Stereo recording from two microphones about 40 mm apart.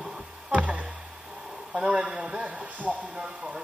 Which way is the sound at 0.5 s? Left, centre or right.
Right.